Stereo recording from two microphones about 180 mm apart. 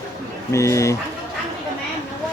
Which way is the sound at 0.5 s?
15° left (ahead or behind).